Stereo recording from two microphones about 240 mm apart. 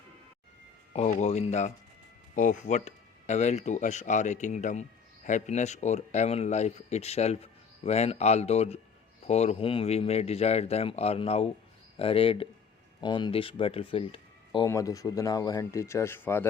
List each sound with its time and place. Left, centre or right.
0.9 s speech: left; by 16.5 s centre